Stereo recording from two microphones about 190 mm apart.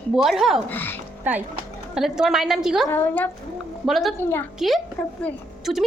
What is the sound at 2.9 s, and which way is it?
Speech, 10° left (ahead or behind).